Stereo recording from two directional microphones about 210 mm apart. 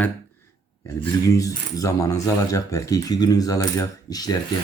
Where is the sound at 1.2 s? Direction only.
15° left (ahead or behind).